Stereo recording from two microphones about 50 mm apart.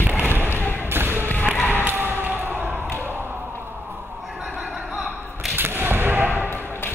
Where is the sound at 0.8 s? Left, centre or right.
Right.